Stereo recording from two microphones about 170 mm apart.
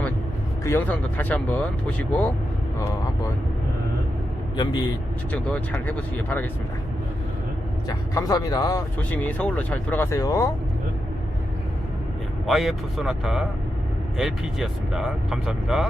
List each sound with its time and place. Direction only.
0.6 s speech: 15° left (ahead or behind)
4.5 s speech: 25° left (ahead or behind)
5.3 s speech: 10° left (ahead or behind)
7.9 s speech: 20° left (ahead or behind)
9.0 s speech: 10° left (ahead or behind)
12.5 s speech: centre (ahead or behind)